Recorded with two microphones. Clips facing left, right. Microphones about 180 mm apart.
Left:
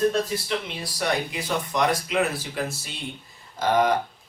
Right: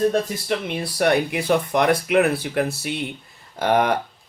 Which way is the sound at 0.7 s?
60° right (ahead or behind).